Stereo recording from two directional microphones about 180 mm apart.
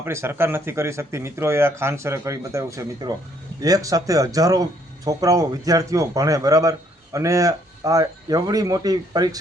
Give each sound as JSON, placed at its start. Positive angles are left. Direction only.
{"t": 0.0, "sound": "speech", "side_deg": -15}